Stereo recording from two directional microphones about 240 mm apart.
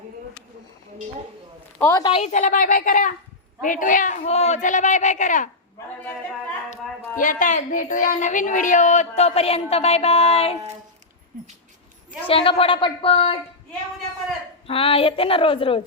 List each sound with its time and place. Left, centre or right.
1.8 s a woman's voice: centre; by 5.5 s left
7.2 s a woman's voice: left
12.2 s a woman's voice: left
14.7 s a woman's voice: left